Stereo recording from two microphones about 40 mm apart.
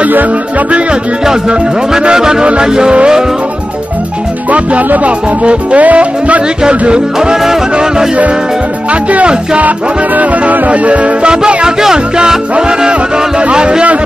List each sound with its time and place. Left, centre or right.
1.5 s music: right
4.5 s music: right
6.9 s music: centre
9.1 s music: right
9.6 s music: right
10.7 s music: right